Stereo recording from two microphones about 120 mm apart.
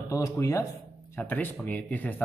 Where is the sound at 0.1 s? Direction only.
25° left (ahead or behind).